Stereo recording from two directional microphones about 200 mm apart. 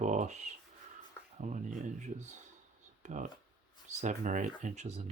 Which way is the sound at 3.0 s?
35° right (ahead or behind).